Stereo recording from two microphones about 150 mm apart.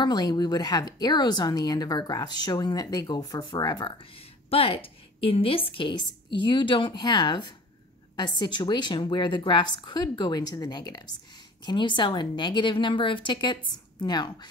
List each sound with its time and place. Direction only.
0.0 s a woman's voice: 30° left (ahead or behind)